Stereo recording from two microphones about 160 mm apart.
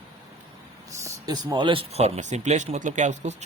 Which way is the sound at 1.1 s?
25° right (ahead or behind).